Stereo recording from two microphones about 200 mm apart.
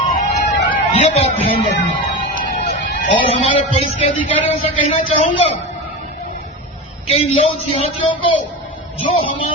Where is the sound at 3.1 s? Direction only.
30° left (ahead or behind).